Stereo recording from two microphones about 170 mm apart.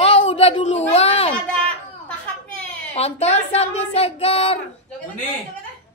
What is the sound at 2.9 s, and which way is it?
Speech, 40° left (ahead or behind).